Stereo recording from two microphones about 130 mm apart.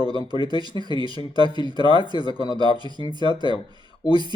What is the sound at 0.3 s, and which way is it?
Speech, 35° right (ahead or behind).